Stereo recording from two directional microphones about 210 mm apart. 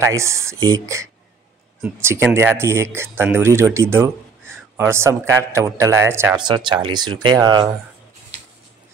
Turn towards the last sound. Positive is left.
turn(degrees=-15)  # may be behind; listen again after turning